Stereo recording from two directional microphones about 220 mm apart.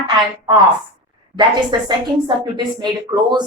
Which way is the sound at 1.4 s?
20° right (ahead or behind).